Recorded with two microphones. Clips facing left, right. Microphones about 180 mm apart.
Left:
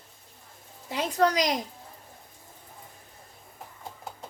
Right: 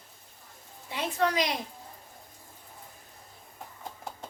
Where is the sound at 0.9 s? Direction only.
40° left (ahead or behind).